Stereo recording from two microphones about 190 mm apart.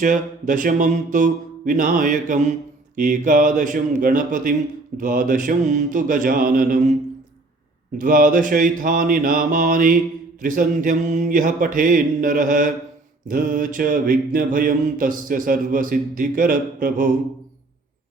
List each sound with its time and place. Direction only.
0.0 s mantra: 45° right (ahead or behind)
7.9 s mantra: 45° right (ahead or behind)